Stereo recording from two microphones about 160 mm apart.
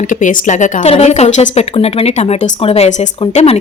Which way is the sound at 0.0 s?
55° left (ahead or behind).